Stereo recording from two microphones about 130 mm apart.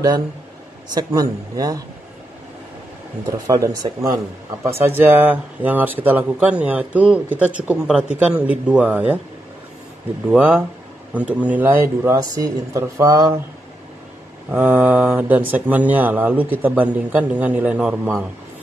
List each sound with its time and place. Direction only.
0.9 s speech: 30° right (ahead or behind)
3.3 s speech: 25° right (ahead or behind)
4.8 s speech: 15° right (ahead or behind)
10.3 s speech: 15° right (ahead or behind)
14.5 s speech: 15° right (ahead or behind)